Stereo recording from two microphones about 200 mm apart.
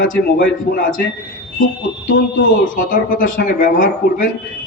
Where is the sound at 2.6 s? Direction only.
40° left (ahead or behind).